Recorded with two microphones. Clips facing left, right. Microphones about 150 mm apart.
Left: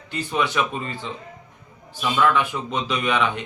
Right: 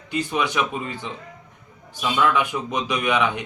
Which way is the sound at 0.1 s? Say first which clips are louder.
Even; 15° right (ahead or behind).